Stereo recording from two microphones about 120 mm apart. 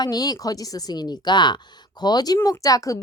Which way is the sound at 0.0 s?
35° left (ahead or behind).